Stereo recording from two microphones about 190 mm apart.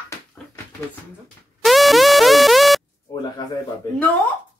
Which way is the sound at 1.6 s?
Centre (ahead or behind).